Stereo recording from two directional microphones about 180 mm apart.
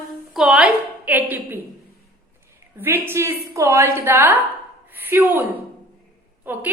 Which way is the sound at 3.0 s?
15° right (ahead or behind).